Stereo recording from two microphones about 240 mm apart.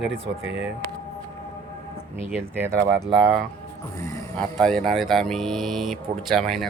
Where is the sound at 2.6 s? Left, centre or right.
Centre.